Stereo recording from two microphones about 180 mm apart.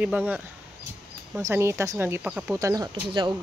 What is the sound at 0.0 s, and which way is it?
Speech, 10° right (ahead or behind).